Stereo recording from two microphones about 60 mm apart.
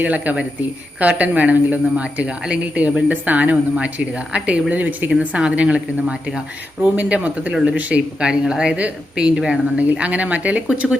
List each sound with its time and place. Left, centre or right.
0.0 s speech: right
7.8 s speech: right
9.9 s speech: right